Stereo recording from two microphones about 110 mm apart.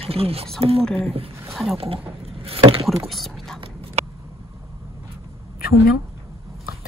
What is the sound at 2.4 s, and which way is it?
Speech, 60° right (ahead or behind).